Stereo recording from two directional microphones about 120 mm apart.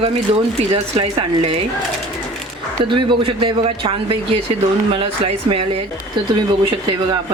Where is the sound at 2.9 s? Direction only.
45° right (ahead or behind).